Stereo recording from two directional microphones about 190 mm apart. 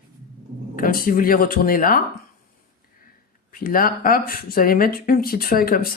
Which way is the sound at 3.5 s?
50° left (ahead or behind).